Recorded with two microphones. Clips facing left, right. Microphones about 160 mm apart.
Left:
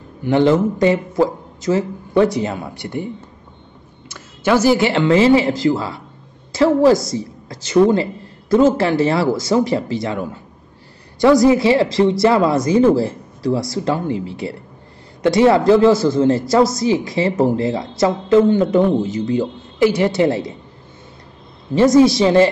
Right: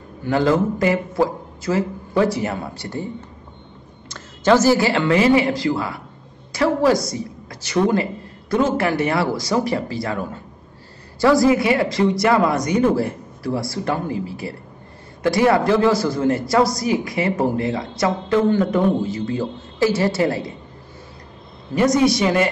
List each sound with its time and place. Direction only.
0.2 s a woman's voice: 25° left (ahead or behind)
4.1 s a woman's voice: 10° left (ahead or behind)
21.7 s a woman's voice: 25° left (ahead or behind)